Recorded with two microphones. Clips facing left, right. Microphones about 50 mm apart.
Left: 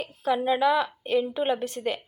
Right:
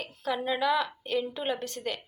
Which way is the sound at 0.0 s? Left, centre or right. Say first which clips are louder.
Left 6 dB; centre.